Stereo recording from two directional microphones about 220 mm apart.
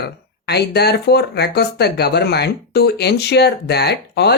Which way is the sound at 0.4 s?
50° left (ahead or behind).